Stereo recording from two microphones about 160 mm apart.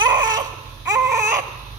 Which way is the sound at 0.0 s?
25° right (ahead or behind).